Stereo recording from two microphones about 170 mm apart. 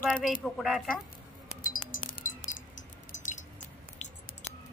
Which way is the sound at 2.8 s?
45° left (ahead or behind).